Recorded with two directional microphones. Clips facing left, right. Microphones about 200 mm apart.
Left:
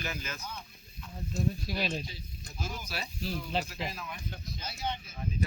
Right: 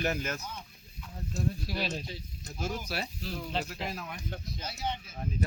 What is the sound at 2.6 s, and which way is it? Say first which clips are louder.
Speech: right 5 dB; 60° right (ahead or behind).